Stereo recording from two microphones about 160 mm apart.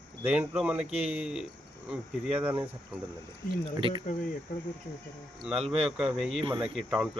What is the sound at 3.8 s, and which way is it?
Speech, 30° right (ahead or behind).